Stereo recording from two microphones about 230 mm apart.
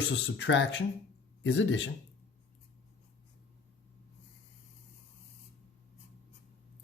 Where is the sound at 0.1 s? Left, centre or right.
Left.